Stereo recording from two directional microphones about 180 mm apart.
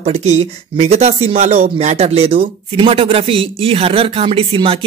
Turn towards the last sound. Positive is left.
turn(degrees=-30)  # may be behind; listen again after turning